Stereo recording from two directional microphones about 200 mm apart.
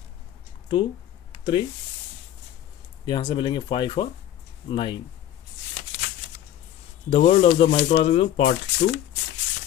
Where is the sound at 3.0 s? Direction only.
25° left (ahead or behind).